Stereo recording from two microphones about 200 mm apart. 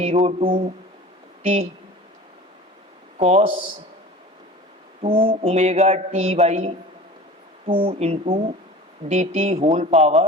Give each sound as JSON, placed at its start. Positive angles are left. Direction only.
{"t": 0.0, "sound": "a man's voice", "side_deg": -30}
{"t": 3.2, "sound": "a man's voice", "side_deg": -35}
{"t": 5.0, "sound": "a man's voice", "side_deg": -25}